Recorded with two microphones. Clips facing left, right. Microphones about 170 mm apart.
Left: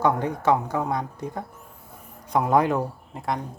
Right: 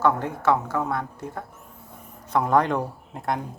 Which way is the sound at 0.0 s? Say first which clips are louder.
Even; 15° left (ahead or behind).